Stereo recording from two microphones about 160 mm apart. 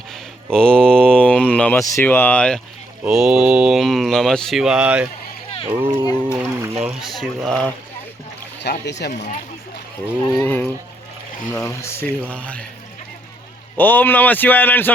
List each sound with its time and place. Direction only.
0.1 s a sound: 5° left (ahead or behind)
1.8 s speech: 15° left (ahead or behind)
3.0 s speech: 5° right (ahead or behind)
5.6 s speech: 35° right (ahead or behind)
6.2 s a sound: 15° right (ahead or behind)
6.8 s speech: centre (ahead or behind)
8.6 s speech: 85° left
10.4 s speech: 10° left (ahead or behind)
13.7 s speech: 10° left (ahead or behind)